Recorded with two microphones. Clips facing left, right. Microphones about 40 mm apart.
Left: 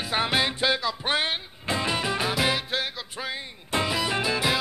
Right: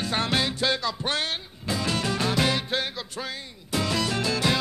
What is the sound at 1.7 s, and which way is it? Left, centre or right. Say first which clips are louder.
Music: left 1 dB; left.